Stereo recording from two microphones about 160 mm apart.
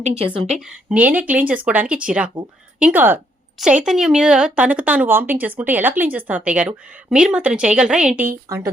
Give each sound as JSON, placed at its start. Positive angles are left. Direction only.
{"t": 0.3, "sound": "a woman's voice", "side_deg": -35}
{"t": 0.6, "sound": "a woman's voice", "side_deg": -5}